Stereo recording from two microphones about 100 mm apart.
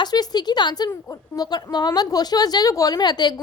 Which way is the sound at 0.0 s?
40° left (ahead or behind).